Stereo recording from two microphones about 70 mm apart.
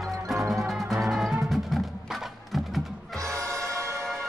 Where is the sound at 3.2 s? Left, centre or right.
Right.